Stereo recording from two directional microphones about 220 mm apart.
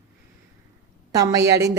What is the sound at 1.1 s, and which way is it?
Speech, 15° right (ahead or behind).